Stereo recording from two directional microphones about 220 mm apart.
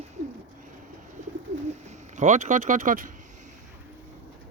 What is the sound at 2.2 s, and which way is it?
Speech, 35° right (ahead or behind).